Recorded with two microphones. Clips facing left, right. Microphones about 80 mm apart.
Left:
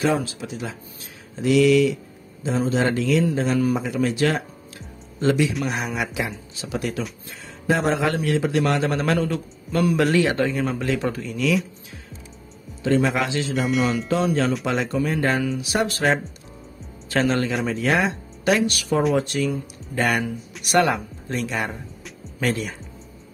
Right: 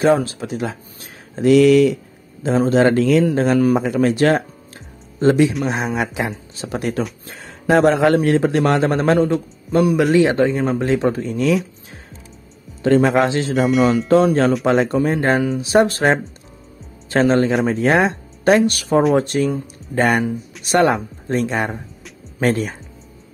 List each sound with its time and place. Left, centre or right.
0.0 s a man's voice: right
5.7 s speech: right
6.1 s speech: right
12.8 s speech: right
17.1 s speech: right